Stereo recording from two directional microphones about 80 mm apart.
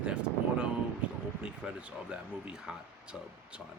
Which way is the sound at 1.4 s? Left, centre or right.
Centre.